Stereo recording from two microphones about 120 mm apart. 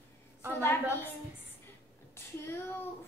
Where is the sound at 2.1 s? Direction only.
20° left (ahead or behind).